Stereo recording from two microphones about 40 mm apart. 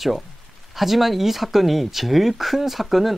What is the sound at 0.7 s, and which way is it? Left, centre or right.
Speech, centre.